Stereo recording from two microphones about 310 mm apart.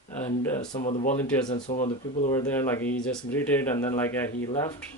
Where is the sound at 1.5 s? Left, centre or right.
Left.